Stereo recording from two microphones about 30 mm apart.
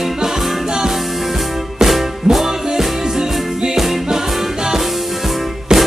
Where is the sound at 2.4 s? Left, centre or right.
Centre.